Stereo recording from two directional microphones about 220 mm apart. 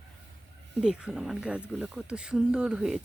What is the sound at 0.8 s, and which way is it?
Speech, 5° right (ahead or behind).